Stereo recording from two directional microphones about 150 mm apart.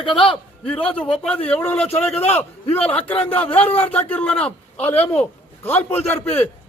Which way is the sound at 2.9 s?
10° left (ahead or behind).